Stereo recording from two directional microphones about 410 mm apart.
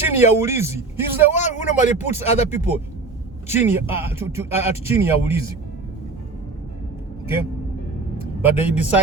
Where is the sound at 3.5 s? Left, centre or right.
Centre.